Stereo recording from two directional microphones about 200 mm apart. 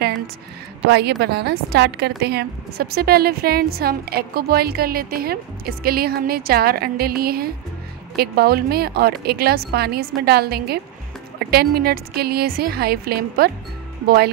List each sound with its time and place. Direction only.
0.8 s a woman's voice: 55° right (ahead or behind)